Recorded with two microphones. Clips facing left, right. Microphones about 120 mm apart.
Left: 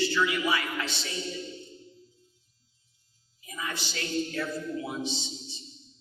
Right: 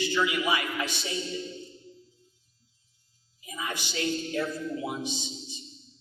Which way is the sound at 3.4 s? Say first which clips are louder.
Right 1 dB; 15° right (ahead or behind).